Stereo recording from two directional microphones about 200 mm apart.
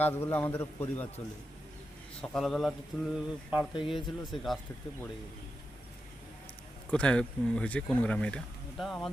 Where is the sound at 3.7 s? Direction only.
25° left (ahead or behind).